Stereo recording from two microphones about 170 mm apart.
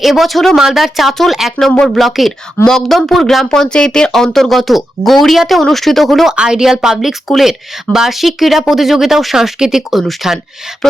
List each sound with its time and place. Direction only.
0.0 s speech: centre (ahead or behind)